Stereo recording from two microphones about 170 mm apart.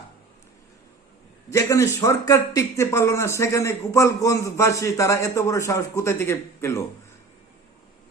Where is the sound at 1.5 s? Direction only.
20° left (ahead or behind).